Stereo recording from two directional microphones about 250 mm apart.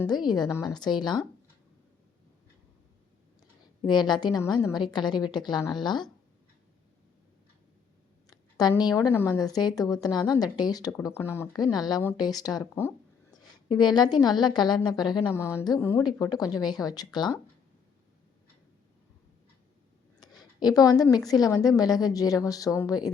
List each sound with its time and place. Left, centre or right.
0.1 s speech: centre
3.8 s speech: centre
8.3 s speech: centre
20.1 s a sound: centre
21.2 s speech: centre